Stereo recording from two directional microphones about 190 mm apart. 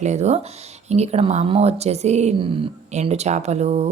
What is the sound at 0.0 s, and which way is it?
A woman's voice, 35° right (ahead or behind).